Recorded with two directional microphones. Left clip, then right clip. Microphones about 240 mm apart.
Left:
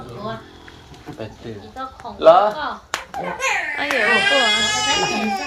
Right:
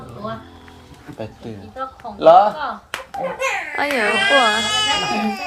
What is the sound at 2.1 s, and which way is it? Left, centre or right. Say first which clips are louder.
Speech: right 1 dB; right.